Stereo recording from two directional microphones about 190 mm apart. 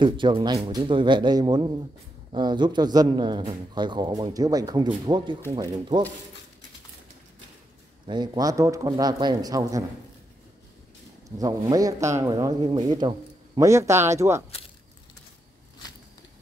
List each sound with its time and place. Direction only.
0.0 s speech: 25° right (ahead or behind)
8.1 s speech: 20° right (ahead or behind)
11.2 s speech: 20° right (ahead or behind)